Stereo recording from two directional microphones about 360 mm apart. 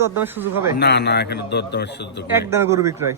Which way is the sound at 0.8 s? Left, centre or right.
Left.